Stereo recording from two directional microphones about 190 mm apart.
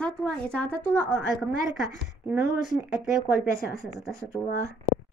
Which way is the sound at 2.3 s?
5° right (ahead or behind).